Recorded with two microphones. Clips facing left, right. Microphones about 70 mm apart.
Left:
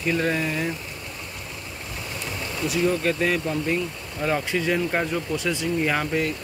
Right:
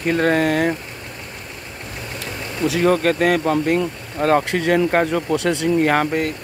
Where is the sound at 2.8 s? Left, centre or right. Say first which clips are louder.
Right 6 dB; right.